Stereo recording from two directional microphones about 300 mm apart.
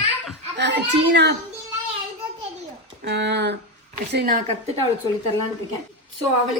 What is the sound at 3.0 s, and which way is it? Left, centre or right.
A woman's voice, right.